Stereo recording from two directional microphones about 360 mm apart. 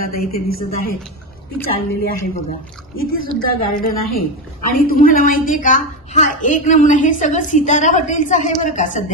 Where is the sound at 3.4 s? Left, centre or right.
Left.